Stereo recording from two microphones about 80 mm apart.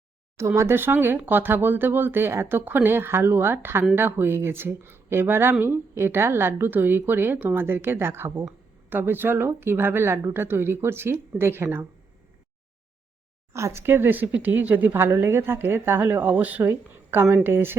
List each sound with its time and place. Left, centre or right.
0.3 s speech: right
13.5 s speech: right